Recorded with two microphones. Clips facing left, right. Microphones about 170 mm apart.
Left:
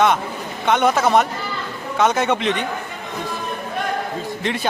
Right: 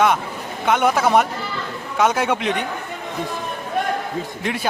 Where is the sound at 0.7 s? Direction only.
5° right (ahead or behind).